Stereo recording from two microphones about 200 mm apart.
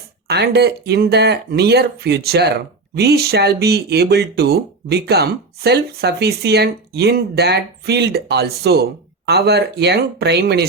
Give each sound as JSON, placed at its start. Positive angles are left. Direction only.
{"t": 0.3, "sound": "speech", "side_deg": -55}